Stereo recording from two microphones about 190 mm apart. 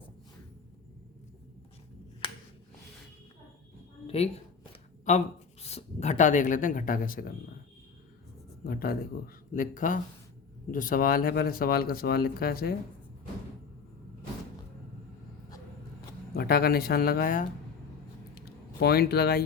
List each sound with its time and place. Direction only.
4.0 s a sound: 30° left (ahead or behind)
5.1 s speech: 40° left (ahead or behind)
8.6 s speech: 55° left (ahead or behind)
16.3 s speech: 55° left (ahead or behind)